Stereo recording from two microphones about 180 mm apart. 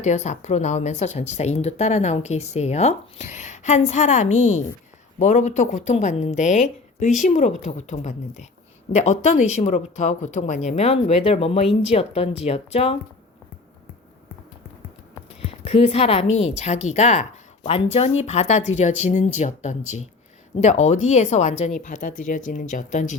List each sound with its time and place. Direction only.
0.0 s speech: 40° left (ahead or behind)
15.6 s speech: 35° left (ahead or behind)